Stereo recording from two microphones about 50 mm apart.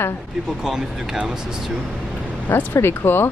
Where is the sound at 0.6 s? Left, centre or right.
Centre.